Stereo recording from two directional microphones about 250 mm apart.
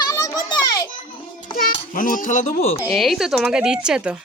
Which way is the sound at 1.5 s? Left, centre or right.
Left.